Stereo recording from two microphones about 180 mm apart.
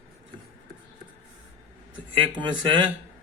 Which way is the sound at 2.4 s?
25° right (ahead or behind).